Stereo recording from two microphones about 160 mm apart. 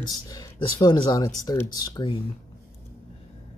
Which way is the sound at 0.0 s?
25° left (ahead or behind).